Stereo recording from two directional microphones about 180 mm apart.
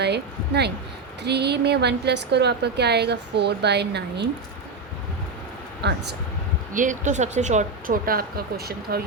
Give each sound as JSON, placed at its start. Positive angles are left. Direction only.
{"t": 0.0, "sound": "a woman's voice", "side_deg": -65}
{"t": 5.8, "sound": "a woman's voice", "side_deg": -70}
{"t": 6.7, "sound": "speech", "side_deg": -45}